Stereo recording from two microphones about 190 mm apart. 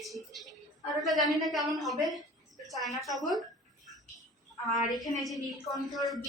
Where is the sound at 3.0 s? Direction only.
Centre (ahead or behind).